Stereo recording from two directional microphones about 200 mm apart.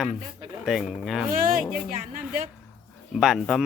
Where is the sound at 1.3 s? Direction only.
45° right (ahead or behind).